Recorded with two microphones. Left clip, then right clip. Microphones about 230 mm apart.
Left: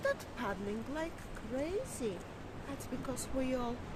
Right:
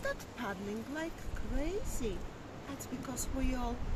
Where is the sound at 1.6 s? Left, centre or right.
Centre.